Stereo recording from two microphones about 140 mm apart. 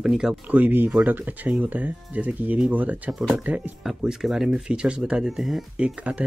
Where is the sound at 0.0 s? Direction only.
5° right (ahead or behind).